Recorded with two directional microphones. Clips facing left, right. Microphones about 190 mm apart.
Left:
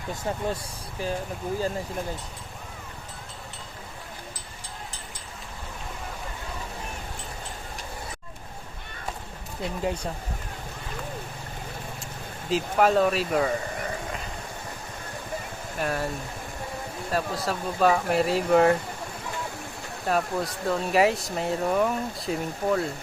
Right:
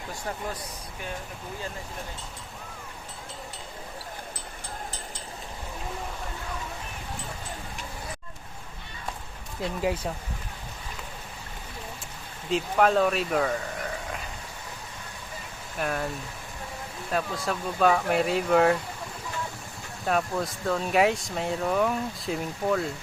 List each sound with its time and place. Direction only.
0.3 s speech: 30° left (ahead or behind)
9.8 s speech: 5° right (ahead or behind)
12.5 s speech: 5° left (ahead or behind)
15.8 s speech: centre (ahead or behind)
17.1 s speech: centre (ahead or behind)
20.1 s speech: centre (ahead or behind)